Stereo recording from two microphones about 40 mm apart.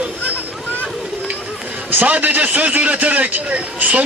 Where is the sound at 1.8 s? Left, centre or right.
Right.